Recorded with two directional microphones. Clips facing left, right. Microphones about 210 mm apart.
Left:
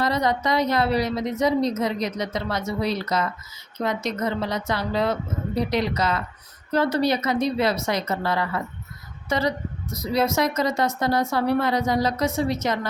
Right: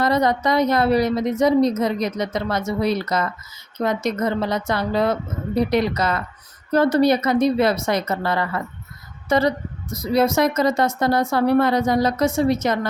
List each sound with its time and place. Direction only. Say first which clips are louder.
0.0 s a woman's voice: right 4 dB; 50° right (ahead or behind)
9.9 s a woman's voice: right 4 dB; 55° right (ahead or behind)